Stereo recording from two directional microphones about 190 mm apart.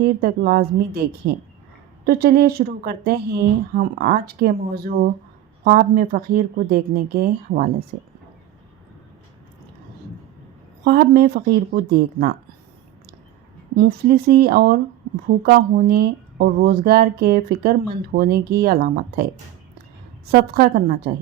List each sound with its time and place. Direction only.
0.2 s speech: 50° right (ahead or behind)
10.8 s speech: 55° right (ahead or behind)
13.7 s speech: 55° right (ahead or behind)